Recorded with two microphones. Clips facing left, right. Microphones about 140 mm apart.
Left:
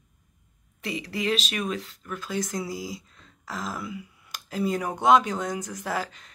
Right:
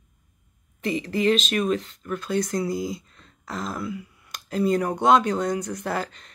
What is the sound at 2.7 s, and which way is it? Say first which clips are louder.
Speech: right 6 dB; 55° right (ahead or behind).